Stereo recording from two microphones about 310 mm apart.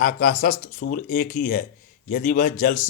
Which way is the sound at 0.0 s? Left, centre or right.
Left.